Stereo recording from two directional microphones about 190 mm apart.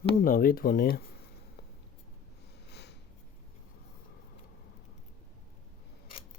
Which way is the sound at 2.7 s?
60° left (ahead or behind).